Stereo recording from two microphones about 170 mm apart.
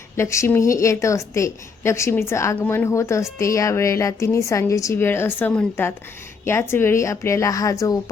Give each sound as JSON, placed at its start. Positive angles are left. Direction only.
{"t": 0.2, "sound": "a woman's voice", "side_deg": 15}